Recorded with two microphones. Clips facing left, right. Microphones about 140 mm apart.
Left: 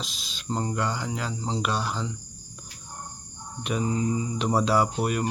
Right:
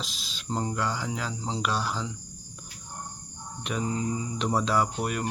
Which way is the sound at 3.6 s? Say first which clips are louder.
Left 3 dB; 5° left (ahead or behind).